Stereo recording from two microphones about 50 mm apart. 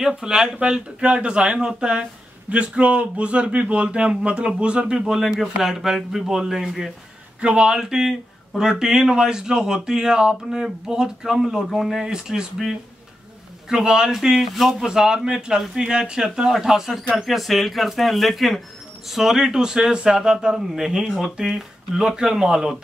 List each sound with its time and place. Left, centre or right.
0.0 s speech: centre
7.3 s speech: right; by 14.9 s centre
14.9 s speech: centre
16.2 s speech: centre